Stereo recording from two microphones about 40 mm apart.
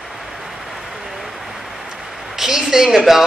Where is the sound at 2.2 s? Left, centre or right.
Centre.